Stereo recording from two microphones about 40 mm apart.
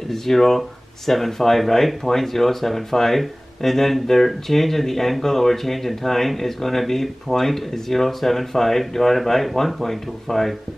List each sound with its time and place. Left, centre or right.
0.1 s speech: centre